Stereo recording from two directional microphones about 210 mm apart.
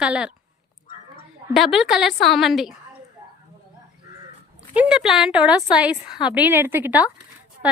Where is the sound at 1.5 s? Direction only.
Centre (ahead or behind).